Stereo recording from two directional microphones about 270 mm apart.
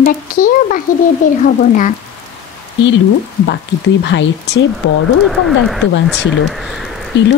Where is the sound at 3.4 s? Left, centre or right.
Left.